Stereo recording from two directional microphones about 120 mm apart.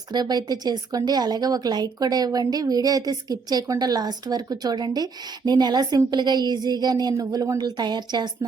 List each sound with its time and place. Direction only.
0.1 s speech: 35° right (ahead or behind)